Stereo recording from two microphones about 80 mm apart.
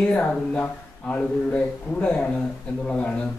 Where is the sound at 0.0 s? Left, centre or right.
Centre.